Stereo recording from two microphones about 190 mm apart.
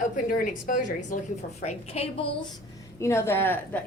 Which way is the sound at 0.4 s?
45° left (ahead or behind).